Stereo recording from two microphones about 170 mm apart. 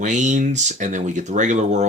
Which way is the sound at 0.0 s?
45° right (ahead or behind).